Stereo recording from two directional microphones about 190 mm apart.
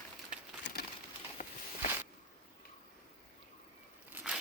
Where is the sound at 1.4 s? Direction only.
45° left (ahead or behind).